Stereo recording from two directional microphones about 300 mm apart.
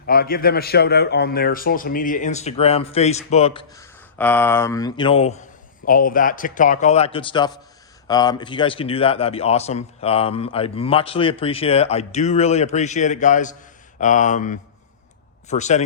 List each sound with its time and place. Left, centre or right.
0.0 s a man's voice: left